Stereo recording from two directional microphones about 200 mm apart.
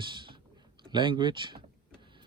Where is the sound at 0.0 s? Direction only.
25° right (ahead or behind).